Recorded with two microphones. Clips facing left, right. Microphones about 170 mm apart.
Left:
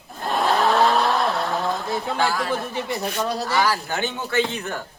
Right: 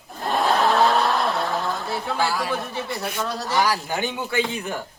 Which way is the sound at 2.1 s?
10° right (ahead or behind).